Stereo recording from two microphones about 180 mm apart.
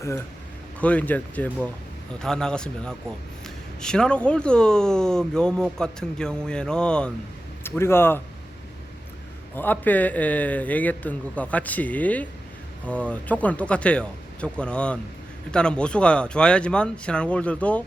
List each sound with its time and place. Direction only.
0.8 s a man's voice: 10° left (ahead or behind)
9.6 s a man's voice: 10° left (ahead or behind)